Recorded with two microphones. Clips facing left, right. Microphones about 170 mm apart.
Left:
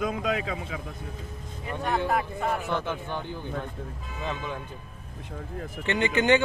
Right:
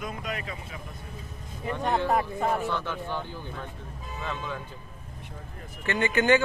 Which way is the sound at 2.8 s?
15° left (ahead or behind).